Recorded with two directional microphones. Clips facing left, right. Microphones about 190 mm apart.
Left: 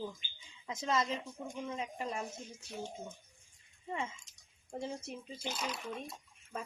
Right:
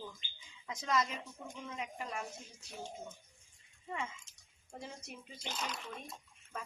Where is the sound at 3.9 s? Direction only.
25° left (ahead or behind).